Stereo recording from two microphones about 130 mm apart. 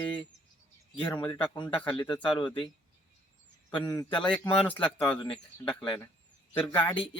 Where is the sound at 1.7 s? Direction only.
10° left (ahead or behind).